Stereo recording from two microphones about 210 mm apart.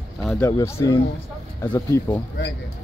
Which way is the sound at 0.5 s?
15° left (ahead or behind).